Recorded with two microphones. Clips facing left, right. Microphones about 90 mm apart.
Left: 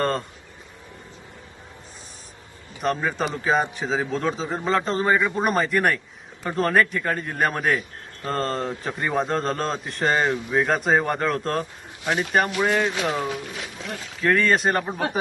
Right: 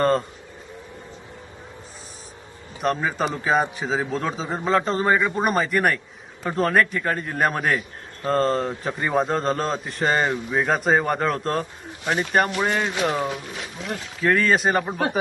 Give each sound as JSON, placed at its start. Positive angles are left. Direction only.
{"t": 0.0, "sound": "speech", "side_deg": 0}
{"t": 2.8, "sound": "a man's voice", "side_deg": 0}
{"t": 13.2, "sound": "speech", "side_deg": -25}
{"t": 14.2, "sound": "a man's voice", "side_deg": 0}